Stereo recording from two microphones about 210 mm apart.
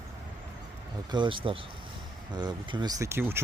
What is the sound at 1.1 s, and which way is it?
Speech, 20° right (ahead or behind).